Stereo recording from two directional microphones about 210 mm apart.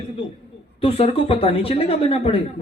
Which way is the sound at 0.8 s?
25° left (ahead or behind).